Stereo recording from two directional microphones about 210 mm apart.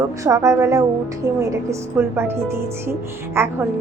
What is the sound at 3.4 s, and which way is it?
Speech, 10° right (ahead or behind).